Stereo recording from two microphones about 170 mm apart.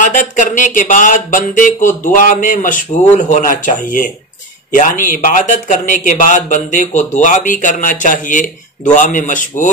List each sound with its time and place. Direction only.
0.0 s speech: 50° left (ahead or behind)